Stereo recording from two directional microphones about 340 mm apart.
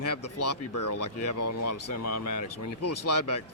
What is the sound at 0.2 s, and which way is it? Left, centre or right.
Speech, left.